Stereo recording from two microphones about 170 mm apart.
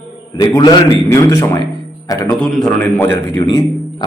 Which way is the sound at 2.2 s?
5° left (ahead or behind).